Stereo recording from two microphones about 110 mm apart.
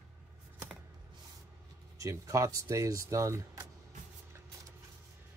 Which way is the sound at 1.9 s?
30° right (ahead or behind).